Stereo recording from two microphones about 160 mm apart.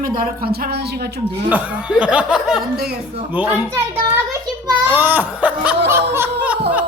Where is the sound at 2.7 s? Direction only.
75° right (ahead or behind).